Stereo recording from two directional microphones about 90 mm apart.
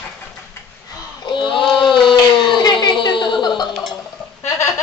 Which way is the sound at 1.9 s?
65° left (ahead or behind).